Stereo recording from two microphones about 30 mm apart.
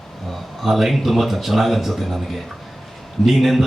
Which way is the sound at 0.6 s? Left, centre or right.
Centre.